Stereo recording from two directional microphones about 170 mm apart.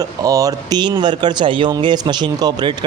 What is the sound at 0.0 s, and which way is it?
Speech, 20° right (ahead or behind).